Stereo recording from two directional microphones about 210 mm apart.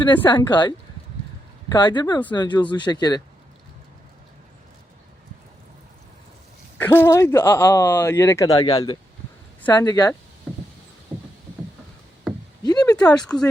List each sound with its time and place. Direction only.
0.3 s speech: 20° left (ahead or behind)
1.7 s speech: 20° left (ahead or behind)
6.7 s speech: 10° left (ahead or behind)
10.5 s rowboat: 5° left (ahead or behind)
11.1 s rowboat: 10° right (ahead or behind)
12.3 s a sound: centre (ahead or behind)
12.6 s a sound: 20° left (ahead or behind)
13.0 s speech: 5° left (ahead or behind)